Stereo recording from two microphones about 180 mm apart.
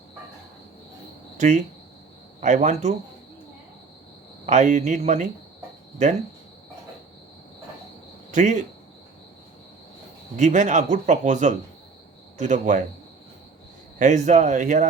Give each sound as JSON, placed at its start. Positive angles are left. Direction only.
{"t": 1.4, "sound": "speech", "side_deg": -40}
{"t": 4.4, "sound": "speech", "side_deg": -40}
{"t": 8.3, "sound": "speech", "side_deg": -40}
{"t": 10.3, "sound": "a man's voice", "side_deg": -40}
{"t": 14.0, "sound": "speech", "side_deg": -40}